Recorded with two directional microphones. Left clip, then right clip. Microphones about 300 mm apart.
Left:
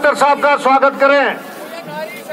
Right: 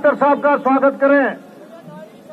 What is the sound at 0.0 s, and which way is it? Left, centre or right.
A man's voice, left.